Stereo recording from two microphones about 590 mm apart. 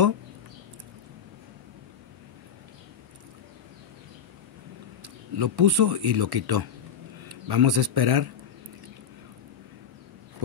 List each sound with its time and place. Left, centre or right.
5.0 s a man's voice: right